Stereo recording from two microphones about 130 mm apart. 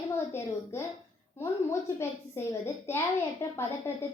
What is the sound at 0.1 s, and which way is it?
A woman's voice, 20° left (ahead or behind).